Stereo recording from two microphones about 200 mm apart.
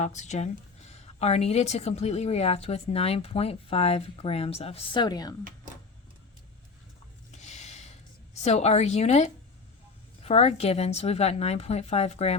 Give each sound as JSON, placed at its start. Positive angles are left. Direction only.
{"t": 0.0, "sound": "a woman's voice", "side_deg": 35}
{"t": 7.3, "sound": "a sound", "side_deg": 35}
{"t": 10.2, "sound": "a woman's voice", "side_deg": 30}